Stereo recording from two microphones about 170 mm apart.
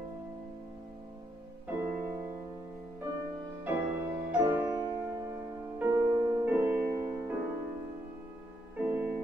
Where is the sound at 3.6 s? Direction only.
10° right (ahead or behind).